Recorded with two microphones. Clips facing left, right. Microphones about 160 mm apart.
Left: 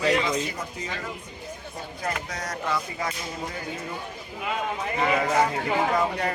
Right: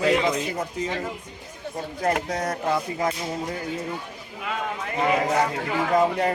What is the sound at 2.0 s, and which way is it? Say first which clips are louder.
Speech: right 7 dB; 55° right (ahead or behind).